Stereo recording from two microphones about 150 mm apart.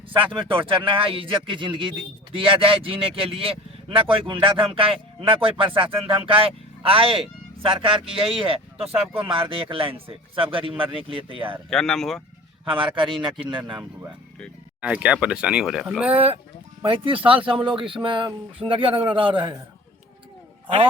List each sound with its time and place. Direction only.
0.1 s speech: 35° right (ahead or behind)
11.7 s speech: 5° left (ahead or behind)
12.6 s a man's voice: 35° right (ahead or behind)
14.8 s speech: 10° right (ahead or behind)
16.8 s speech: 35° right (ahead or behind)